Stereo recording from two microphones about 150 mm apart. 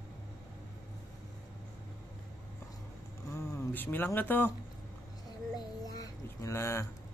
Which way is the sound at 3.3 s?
15° left (ahead or behind).